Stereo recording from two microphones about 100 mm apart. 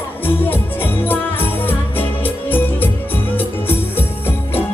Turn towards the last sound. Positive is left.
turn(degrees=20)  # may be behind; listen again after turning